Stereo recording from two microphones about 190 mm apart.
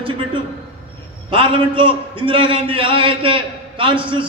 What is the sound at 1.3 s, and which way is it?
A man's voice, 25° right (ahead or behind).